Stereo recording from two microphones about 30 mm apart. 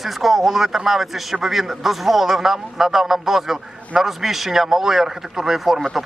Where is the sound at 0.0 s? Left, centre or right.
Centre.